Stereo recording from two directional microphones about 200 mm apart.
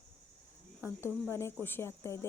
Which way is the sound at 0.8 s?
10° right (ahead or behind).